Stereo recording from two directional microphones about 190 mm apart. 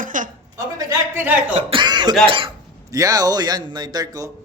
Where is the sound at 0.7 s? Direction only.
15° right (ahead or behind).